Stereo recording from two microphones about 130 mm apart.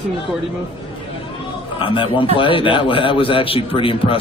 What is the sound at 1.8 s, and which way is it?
Speech, 40° left (ahead or behind).